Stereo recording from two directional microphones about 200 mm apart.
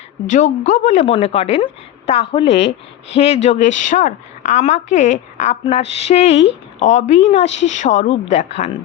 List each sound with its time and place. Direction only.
0.3 s a woman's voice: 40° left (ahead or behind)